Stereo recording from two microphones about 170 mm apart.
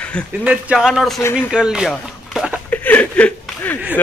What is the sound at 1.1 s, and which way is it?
Speech, 15° left (ahead or behind).